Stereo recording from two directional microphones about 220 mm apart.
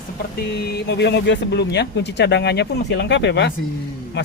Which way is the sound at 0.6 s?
45° left (ahead or behind).